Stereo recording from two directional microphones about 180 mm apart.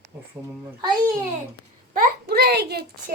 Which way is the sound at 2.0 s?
60° right (ahead or behind).